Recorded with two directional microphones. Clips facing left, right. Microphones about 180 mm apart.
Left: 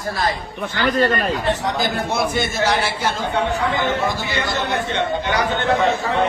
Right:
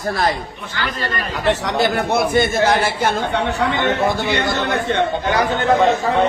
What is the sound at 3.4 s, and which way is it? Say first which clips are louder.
Speech: right 2 dB; 75° right (ahead or behind).